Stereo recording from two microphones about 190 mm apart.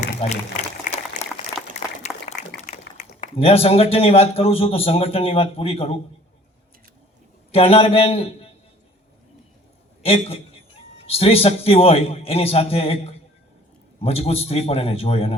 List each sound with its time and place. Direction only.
0.0 s a sound: 35° left (ahead or behind)
3.2 s a man's voice: 30° left (ahead or behind)
7.5 s a man's voice: 30° left (ahead or behind)
10.0 s a man's voice: 30° left (ahead or behind)